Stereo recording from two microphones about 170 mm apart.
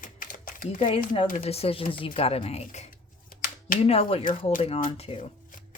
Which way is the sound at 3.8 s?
35° left (ahead or behind).